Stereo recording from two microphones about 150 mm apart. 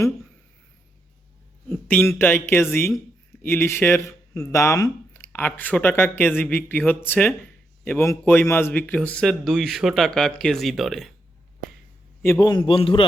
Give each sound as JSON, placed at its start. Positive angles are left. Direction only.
{"t": 1.9, "sound": "speech", "side_deg": 15}
{"t": 12.2, "sound": "a man's voice", "side_deg": 15}
{"t": 12.5, "sound": "a man's voice", "side_deg": 35}